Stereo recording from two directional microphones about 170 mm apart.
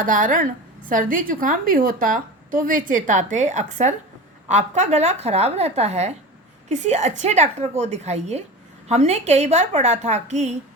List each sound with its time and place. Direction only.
0.0 s a woman's voice: 50° right (ahead or behind)